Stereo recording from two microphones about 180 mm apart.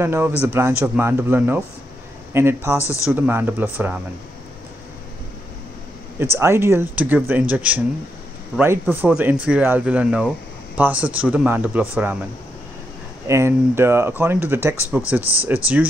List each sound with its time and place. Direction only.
0.0 s speech: 15° right (ahead or behind)
2.8 s speech: 15° left (ahead or behind)
3.1 s speech: 10° right (ahead or behind)
6.1 s speech: 15° right (ahead or behind)
13.3 s speech: 15° right (ahead or behind)